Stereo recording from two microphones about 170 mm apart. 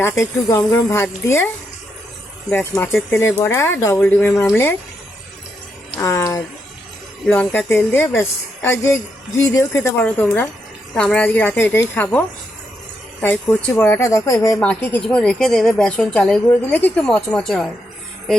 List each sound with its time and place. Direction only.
0.0 s speech: 15° left (ahead or behind)
2.5 s speech: 5° left (ahead or behind)
6.0 s speech: 15° left (ahead or behind)
13.2 s speech: 10° left (ahead or behind)